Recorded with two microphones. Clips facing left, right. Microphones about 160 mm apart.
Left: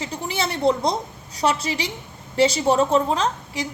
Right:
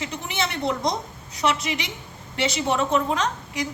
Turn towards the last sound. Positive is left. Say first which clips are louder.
# left 2 dB
turn(degrees=30)  # may be behind; listen again after turning